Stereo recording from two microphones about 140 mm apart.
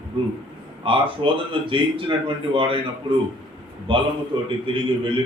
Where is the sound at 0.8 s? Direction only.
40° right (ahead or behind).